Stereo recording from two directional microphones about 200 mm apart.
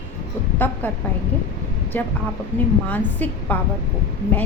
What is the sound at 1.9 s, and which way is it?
A woman's voice, 10° left (ahead or behind).